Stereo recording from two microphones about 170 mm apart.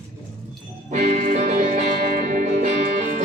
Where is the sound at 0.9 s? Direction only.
45° right (ahead or behind).